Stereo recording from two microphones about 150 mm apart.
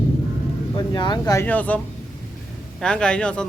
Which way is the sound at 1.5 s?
10° left (ahead or behind).